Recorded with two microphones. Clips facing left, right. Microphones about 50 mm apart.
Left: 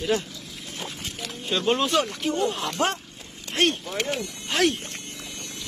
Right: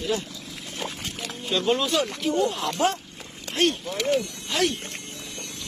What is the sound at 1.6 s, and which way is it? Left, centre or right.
Speech, left.